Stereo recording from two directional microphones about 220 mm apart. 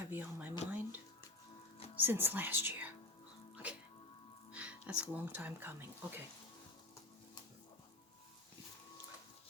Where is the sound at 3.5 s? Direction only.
5° right (ahead or behind).